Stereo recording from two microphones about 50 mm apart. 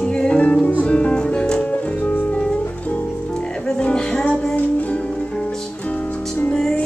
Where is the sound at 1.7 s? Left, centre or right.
Left.